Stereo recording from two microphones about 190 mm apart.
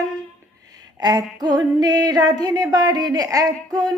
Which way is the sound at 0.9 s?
20° right (ahead or behind).